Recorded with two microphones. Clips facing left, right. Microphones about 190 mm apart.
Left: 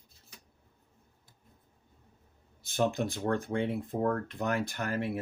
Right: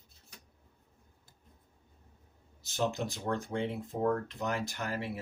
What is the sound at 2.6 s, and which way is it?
Speech, 55° left (ahead or behind).